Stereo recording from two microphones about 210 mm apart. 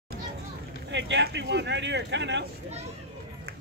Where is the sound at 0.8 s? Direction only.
60° right (ahead or behind).